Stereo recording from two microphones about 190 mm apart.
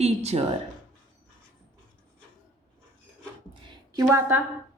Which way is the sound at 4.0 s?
15° right (ahead or behind).